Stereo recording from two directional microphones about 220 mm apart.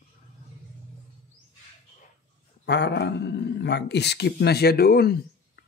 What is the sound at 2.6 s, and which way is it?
Speech, 50° left (ahead or behind).